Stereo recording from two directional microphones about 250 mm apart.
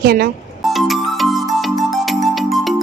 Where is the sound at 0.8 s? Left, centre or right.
Centre.